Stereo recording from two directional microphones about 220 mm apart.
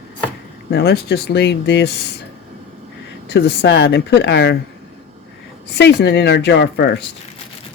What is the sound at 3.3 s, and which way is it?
Speech, 50° left (ahead or behind).